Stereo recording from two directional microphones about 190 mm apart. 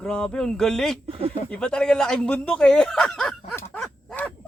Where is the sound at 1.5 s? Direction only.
5° left (ahead or behind).